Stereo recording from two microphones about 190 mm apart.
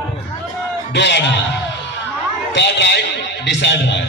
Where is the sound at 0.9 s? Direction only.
65° left (ahead or behind).